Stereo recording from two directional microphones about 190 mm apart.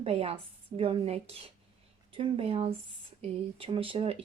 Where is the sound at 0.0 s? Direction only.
30° right (ahead or behind).